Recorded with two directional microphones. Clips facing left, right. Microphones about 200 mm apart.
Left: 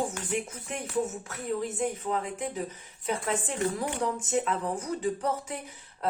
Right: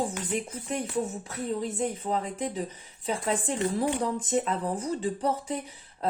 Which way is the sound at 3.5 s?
30° right (ahead or behind).